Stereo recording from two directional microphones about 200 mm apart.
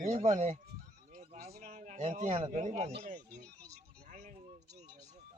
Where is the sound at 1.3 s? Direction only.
35° right (ahead or behind).